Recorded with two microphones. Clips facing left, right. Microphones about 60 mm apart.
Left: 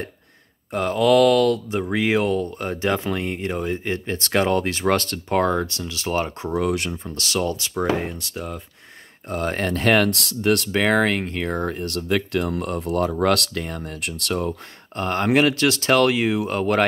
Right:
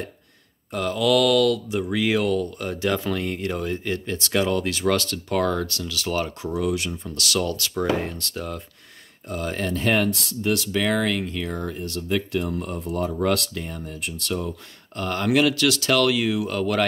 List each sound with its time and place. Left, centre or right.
0.7 s speech: left
6.4 s speech: left
6.9 s speech: left; by 8.6 s centre
9.3 s speech: left
10.5 s speech: left
15.0 s speech: left